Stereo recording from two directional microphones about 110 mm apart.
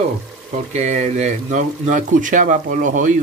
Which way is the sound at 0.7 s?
90° right.